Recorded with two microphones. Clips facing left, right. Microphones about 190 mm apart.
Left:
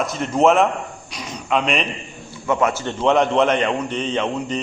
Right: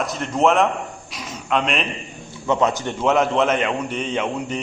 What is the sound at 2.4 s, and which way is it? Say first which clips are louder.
Speech: even; 20° right (ahead or behind).